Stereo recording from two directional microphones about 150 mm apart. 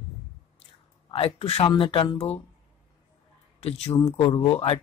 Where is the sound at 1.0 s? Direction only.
40° left (ahead or behind).